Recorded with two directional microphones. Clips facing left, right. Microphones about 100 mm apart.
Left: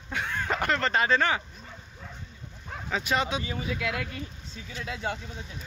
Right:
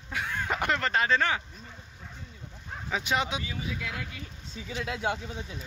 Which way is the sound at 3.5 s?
70° left (ahead or behind).